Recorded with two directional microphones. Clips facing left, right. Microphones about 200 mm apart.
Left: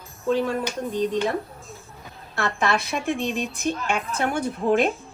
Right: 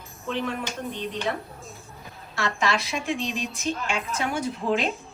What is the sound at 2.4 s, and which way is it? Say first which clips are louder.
A woman's voice: left 2 dB; 55° left (ahead or behind).